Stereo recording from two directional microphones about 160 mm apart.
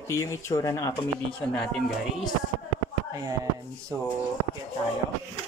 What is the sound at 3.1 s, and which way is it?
Speech, 20° right (ahead or behind).